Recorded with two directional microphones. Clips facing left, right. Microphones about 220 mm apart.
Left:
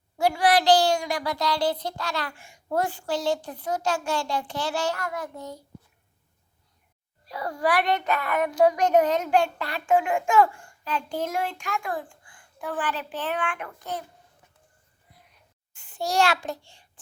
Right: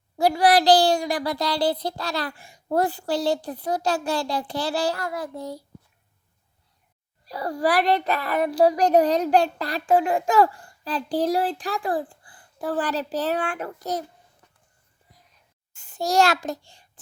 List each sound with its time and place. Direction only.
0.2 s a child's voice: 35° right (ahead or behind)
7.3 s a child's voice: 35° right (ahead or behind)
15.7 s a child's voice: 40° right (ahead or behind)